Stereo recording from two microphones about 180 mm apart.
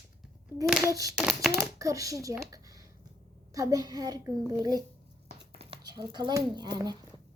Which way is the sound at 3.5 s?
20° right (ahead or behind).